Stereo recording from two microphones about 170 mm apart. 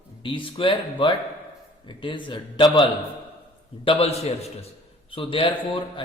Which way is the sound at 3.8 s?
35° left (ahead or behind).